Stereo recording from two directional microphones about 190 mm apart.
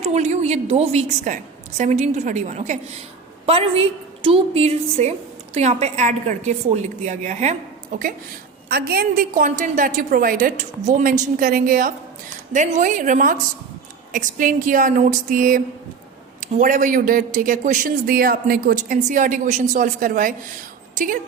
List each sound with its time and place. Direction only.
0.0 s a woman's voice: 35° right (ahead or behind)
7.9 s a man's voice: 50° right (ahead or behind)